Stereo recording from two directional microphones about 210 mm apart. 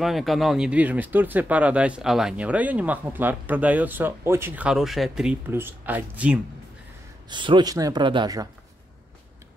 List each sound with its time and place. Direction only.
0.0 s speech: centre (ahead or behind)
7.2 s speech: 20° right (ahead or behind)